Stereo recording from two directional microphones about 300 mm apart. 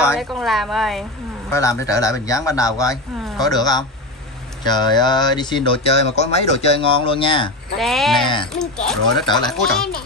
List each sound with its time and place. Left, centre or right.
0.0 s speech: centre
7.7 s speech: centre
9.1 s speech: centre
9.5 s speech: centre